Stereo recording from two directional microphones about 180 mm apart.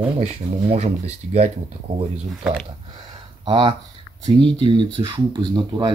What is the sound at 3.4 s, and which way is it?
Speech, 25° right (ahead or behind).